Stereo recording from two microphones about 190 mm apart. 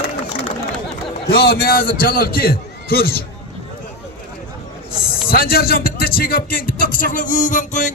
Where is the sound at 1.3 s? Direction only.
55° left (ahead or behind).